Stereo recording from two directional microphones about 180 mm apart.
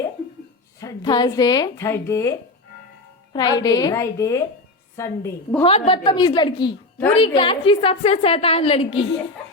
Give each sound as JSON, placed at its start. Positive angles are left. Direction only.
{"t": 0.8, "sound": "a woman's voice", "side_deg": 20}
{"t": 3.3, "sound": "a woman's voice", "side_deg": 20}
{"t": 5.6, "sound": "a woman's voice", "side_deg": 35}